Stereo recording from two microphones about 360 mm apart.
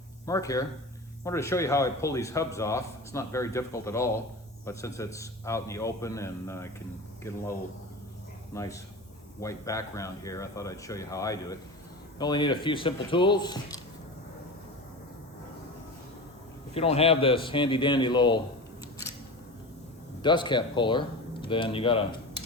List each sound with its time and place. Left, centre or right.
0.3 s speech: centre
8.5 s speech: centre
16.7 s speech: centre
20.2 s speech: centre